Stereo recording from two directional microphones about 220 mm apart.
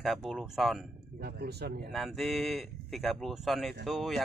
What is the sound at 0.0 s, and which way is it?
Speech, centre (ahead or behind).